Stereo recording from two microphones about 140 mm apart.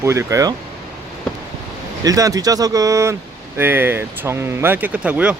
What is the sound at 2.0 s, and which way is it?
Speech, 25° right (ahead or behind).